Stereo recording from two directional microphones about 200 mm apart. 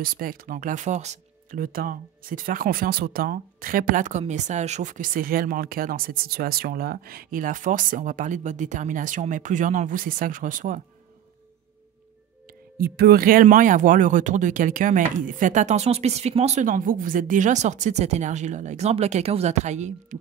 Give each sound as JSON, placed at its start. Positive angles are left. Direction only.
{"t": 0.0, "sound": "speech", "side_deg": -45}
{"t": 12.7, "sound": "speech", "side_deg": -50}